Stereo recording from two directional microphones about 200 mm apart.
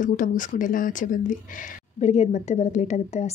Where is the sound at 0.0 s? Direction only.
40° left (ahead or behind).